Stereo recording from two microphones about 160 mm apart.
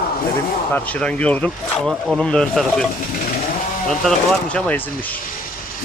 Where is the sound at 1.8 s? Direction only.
5° right (ahead or behind).